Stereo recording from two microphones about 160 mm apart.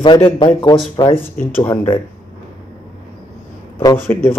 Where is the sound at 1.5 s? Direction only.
15° left (ahead or behind).